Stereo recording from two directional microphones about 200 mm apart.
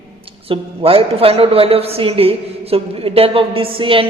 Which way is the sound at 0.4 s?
30° right (ahead or behind).